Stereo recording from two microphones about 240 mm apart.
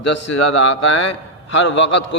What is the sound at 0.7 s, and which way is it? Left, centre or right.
A man's voice, left.